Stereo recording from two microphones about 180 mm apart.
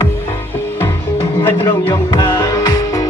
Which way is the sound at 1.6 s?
25° left (ahead or behind).